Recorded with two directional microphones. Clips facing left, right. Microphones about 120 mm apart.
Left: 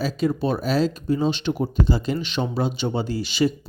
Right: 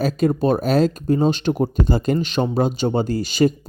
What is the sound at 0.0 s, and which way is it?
Speech, 50° right (ahead or behind).